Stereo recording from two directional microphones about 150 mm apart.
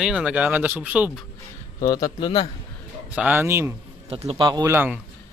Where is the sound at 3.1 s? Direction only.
10° right (ahead or behind).